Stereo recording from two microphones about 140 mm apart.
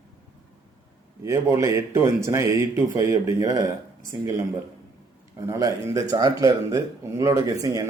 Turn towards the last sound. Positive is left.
turn(degrees=-25)  # may be behind; listen again after turning